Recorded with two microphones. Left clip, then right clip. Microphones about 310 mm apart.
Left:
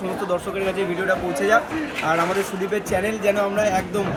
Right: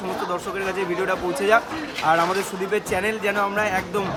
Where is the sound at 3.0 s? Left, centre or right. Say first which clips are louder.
Left 2 dB; right.